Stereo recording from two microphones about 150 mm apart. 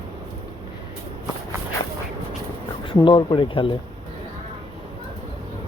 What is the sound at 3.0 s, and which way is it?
Speech, 30° left (ahead or behind).